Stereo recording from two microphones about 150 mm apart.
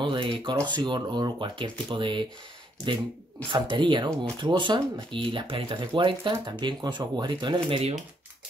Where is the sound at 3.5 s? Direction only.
35° right (ahead or behind).